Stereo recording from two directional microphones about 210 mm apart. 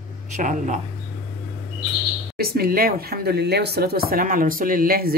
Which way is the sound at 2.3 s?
45° right (ahead or behind).